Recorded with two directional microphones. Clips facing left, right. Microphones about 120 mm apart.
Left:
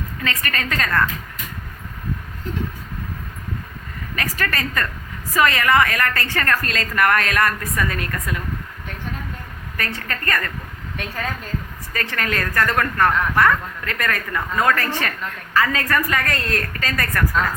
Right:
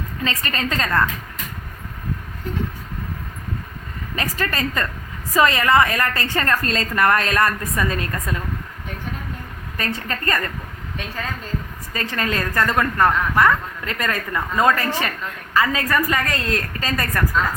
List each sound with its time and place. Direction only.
0.3 s a woman's voice: 25° right (ahead or behind)
4.1 s a woman's voice: 25° right (ahead or behind)
9.7 s a woman's voice: 25° right (ahead or behind)
11.9 s a woman's voice: 25° right (ahead or behind)